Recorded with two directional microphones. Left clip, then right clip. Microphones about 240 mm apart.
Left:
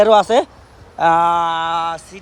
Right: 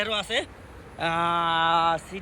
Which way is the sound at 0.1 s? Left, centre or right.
Left.